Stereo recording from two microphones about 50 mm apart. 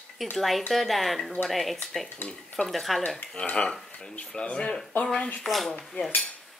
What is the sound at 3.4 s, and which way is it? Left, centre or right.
Speech, left.